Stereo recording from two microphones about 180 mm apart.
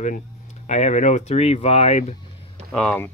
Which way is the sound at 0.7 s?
40° left (ahead or behind).